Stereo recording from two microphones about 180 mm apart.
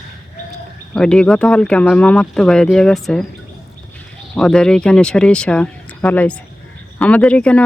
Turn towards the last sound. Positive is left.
turn(degrees=5)  # may be behind; listen again after turning